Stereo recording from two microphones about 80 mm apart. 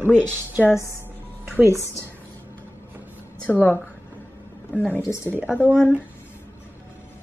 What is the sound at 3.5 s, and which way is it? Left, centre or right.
Speech, left.